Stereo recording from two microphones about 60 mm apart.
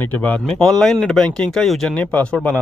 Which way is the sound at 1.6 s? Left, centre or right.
Centre.